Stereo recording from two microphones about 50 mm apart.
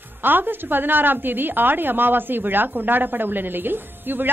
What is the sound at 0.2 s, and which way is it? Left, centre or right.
A woman's voice, right.